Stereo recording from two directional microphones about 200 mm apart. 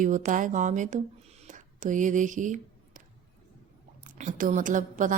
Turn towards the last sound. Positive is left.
turn(degrees=-40)  # may be behind; listen again after turning